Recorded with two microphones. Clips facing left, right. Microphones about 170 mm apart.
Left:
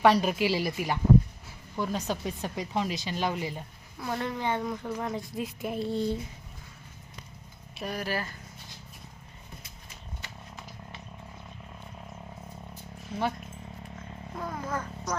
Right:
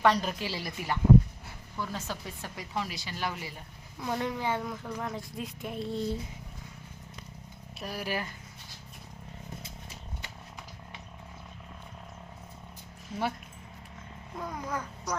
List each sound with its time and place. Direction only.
0.0 s a woman's voice: 15° left (ahead or behind)
4.0 s speech: 10° right (ahead or behind)
7.8 s speech: centre (ahead or behind)
8.0 s speech: 15° right (ahead or behind)
14.4 s a sound: 15° right (ahead or behind)